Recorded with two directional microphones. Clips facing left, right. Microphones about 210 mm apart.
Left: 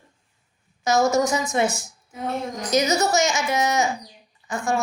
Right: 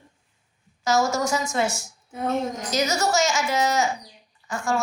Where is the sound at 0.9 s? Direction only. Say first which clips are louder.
Left 3 dB; 20° left (ahead or behind).